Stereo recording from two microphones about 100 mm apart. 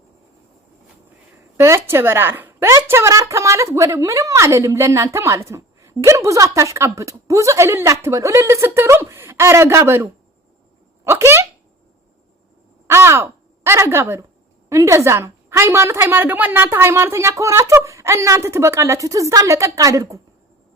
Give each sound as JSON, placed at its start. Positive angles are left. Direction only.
{"t": 1.5, "sound": "a woman's voice", "side_deg": -30}
{"t": 12.9, "sound": "a woman's voice", "side_deg": -25}